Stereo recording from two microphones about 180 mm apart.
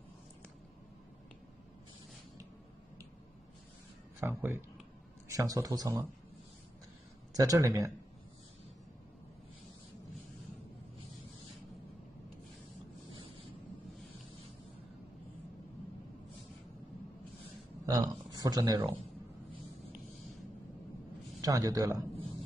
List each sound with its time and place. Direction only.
4.2 s speech: 10° right (ahead or behind)
7.3 s speech: 20° right (ahead or behind)
17.8 s a sound: 20° right (ahead or behind)
21.4 s speech: 20° right (ahead or behind)